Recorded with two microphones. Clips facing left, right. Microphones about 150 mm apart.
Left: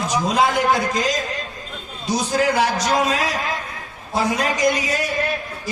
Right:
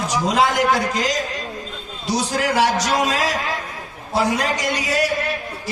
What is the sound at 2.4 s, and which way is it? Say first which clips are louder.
Speech: right 1 dB; 80° right.